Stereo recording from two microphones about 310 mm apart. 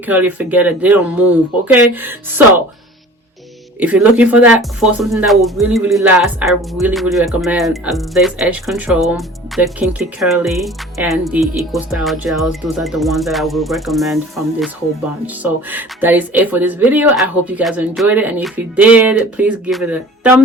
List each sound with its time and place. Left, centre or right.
0.0 s speech: centre
3.8 s speech: centre
15.7 s speech: centre